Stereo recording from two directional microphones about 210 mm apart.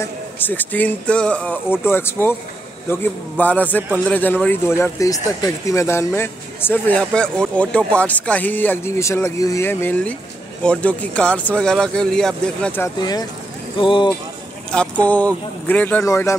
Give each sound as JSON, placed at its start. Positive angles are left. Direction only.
{"t": 0.0, "sound": "speech", "side_deg": 10}
{"t": 14.7, "sound": "speech", "side_deg": 5}